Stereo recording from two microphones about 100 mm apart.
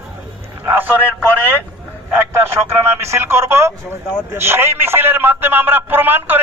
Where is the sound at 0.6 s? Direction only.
20° right (ahead or behind).